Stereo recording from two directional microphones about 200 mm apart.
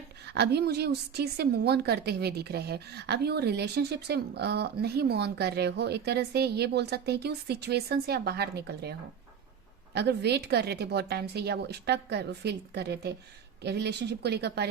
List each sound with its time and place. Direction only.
0.3 s a woman's voice: 55° right (ahead or behind)